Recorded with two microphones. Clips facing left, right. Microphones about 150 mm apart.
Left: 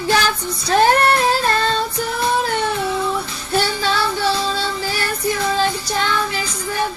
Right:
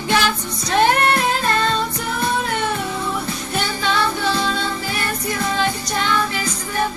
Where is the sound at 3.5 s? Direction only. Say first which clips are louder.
Left 4 dB; 35° left (ahead or behind).